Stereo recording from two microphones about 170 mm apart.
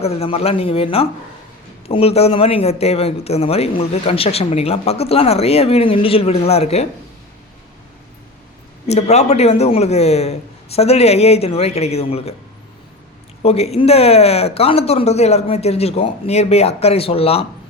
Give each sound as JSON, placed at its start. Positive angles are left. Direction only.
{"t": 0.0, "sound": "a man's voice", "side_deg": 35}
{"t": 8.9, "sound": "a man's voice", "side_deg": 40}
{"t": 13.4, "sound": "a man's voice", "side_deg": 35}